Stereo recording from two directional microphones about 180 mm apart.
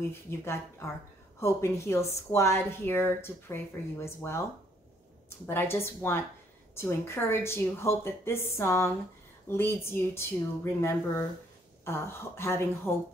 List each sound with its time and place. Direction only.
0.1 s speech: 15° left (ahead or behind)
5.5 s speech: 15° left (ahead or behind)